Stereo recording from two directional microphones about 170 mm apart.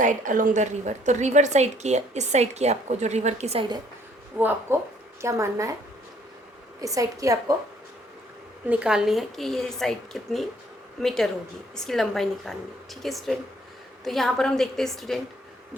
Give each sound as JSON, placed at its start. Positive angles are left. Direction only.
{"t": 0.0, "sound": "a woman's voice", "side_deg": -50}
{"t": 4.4, "sound": "a woman's voice", "side_deg": -10}
{"t": 6.7, "sound": "a woman's voice", "side_deg": -20}
{"t": 8.6, "sound": "a woman's voice", "side_deg": -5}